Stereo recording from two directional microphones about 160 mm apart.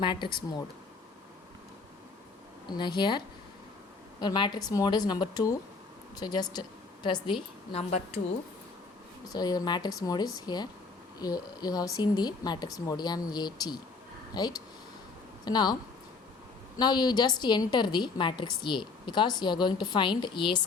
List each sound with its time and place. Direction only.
0.0 s a woman's voice: 30° left (ahead or behind)
2.6 s a woman's voice: 30° left (ahead or behind)
9.3 s a woman's voice: 25° left (ahead or behind)